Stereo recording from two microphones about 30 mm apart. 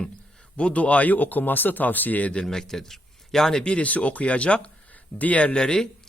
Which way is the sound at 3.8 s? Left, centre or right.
Left.